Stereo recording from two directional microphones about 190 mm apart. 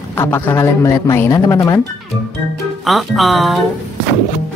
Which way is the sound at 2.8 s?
Centre (ahead or behind).